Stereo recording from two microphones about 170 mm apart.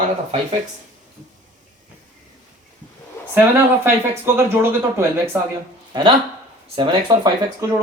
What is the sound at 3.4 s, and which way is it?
Speech, 15° right (ahead or behind).